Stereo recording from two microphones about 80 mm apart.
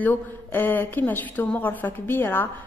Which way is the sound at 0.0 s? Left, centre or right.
Left.